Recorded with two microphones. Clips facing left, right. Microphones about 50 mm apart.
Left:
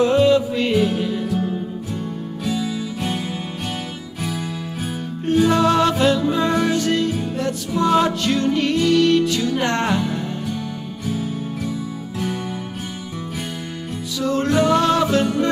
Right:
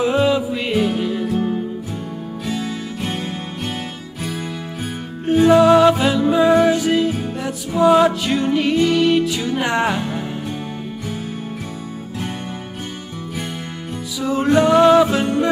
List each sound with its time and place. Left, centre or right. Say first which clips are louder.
0.0 s music: left 2 dB; centre
4.8 s music: right 1 dB; centre
10.1 s music: even; right
14.1 s music: right 3 dB; centre